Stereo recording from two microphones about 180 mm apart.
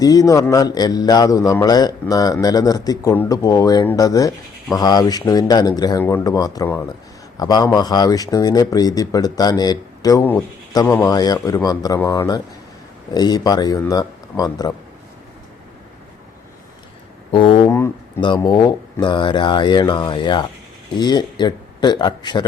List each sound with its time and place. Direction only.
0.0 s speech: 20° left (ahead or behind)
17.3 s speech: 25° left (ahead or behind)